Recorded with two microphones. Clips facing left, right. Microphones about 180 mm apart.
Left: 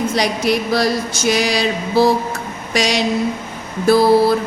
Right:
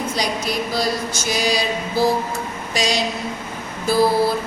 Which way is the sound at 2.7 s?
70° left (ahead or behind).